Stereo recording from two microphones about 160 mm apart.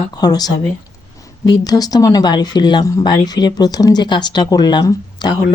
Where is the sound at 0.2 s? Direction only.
25° left (ahead or behind).